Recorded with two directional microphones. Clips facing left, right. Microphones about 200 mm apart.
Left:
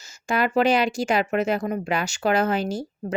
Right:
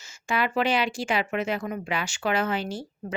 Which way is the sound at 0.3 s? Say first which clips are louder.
Left 5 dB; 45° left (ahead or behind).